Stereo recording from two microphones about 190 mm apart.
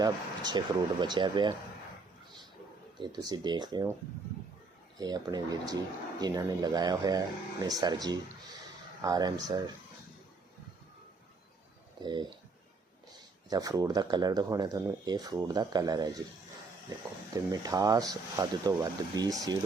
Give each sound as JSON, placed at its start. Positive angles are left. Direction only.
{"t": 0.0, "sound": "speech", "side_deg": -20}
{"t": 3.0, "sound": "speech", "side_deg": -20}
{"t": 4.9, "sound": "speech", "side_deg": -20}
{"t": 13.5, "sound": "speech", "side_deg": -20}
{"t": 17.3, "sound": "speech", "side_deg": -20}